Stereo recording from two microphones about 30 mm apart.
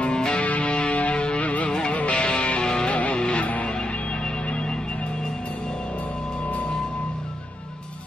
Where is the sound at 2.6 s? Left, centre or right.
Left.